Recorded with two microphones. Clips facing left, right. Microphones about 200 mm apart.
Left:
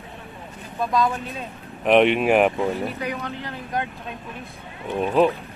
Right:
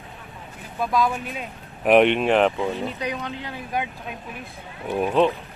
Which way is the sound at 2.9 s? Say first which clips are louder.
Even; 15° right (ahead or behind).